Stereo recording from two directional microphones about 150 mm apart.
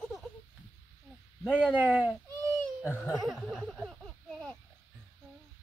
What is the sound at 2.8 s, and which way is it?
Speech, 15° left (ahead or behind).